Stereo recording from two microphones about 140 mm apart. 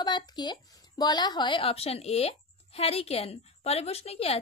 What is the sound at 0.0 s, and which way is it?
Speech, 30° left (ahead or behind).